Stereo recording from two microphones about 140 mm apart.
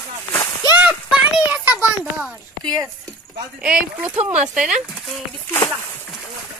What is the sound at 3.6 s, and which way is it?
Speech, 10° right (ahead or behind).